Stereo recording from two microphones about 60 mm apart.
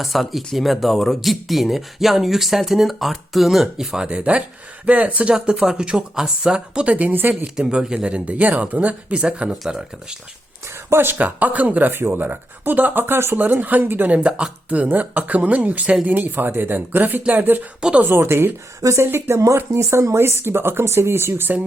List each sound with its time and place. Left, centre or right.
0.0 s speech: centre; by 5.3 s right
5.3 s speech: centre; by 7.3 s right
7.4 s speech: centre
9.5 s speech: centre
10.8 s speech: right
11.2 s speech: right
14.1 s speech: right
17.7 s speech: centre
18.2 s speech: right
19.3 s speech: right
20.1 s speech: right